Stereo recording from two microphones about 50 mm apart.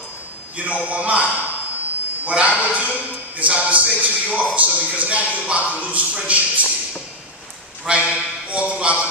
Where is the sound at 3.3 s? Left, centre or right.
Right.